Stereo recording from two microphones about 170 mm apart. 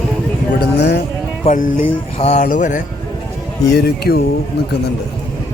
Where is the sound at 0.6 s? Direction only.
65° left (ahead or behind).